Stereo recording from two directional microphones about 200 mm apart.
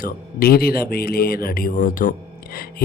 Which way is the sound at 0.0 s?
50° left (ahead or behind).